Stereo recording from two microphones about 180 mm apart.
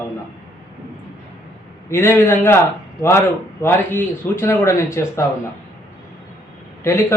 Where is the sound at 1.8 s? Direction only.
15° left (ahead or behind).